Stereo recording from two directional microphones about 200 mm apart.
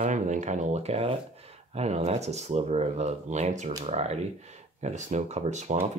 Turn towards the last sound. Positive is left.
turn(degrees=-35)  # may be behind; listen again after turning